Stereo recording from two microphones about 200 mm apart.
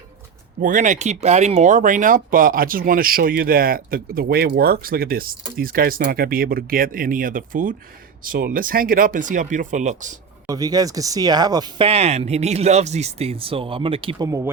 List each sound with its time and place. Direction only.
0.6 s speech: 40° right (ahead or behind)
10.4 s speech: 20° right (ahead or behind)
14.3 s speech: 15° right (ahead or behind)